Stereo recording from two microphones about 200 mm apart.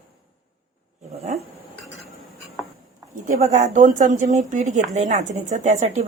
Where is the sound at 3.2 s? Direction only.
40° right (ahead or behind).